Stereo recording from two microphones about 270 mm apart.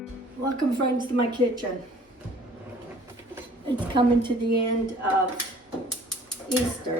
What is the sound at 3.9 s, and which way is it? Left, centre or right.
Speech, centre.